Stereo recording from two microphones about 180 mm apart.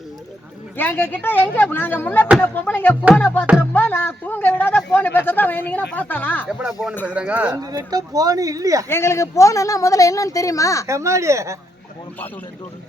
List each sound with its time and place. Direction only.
0.8 s a man's voice: 10° left (ahead or behind)
6.5 s speech: 5° right (ahead or behind)
7.6 s speech: 20° right (ahead or behind)
8.9 s a man's voice: 15° left (ahead or behind)
10.8 s speech: 15° right (ahead or behind)